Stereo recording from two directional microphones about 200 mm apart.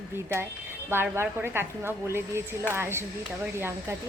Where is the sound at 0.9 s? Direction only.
10° right (ahead or behind).